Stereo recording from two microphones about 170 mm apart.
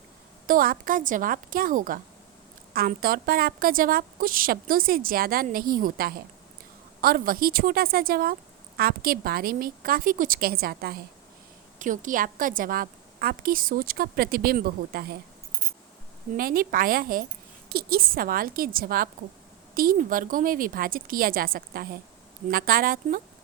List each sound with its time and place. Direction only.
0.4 s a woman's voice: 55° right (ahead or behind)
11.8 s a woman's voice: 50° right (ahead or behind)
16.3 s a woman's voice: 55° right (ahead or behind)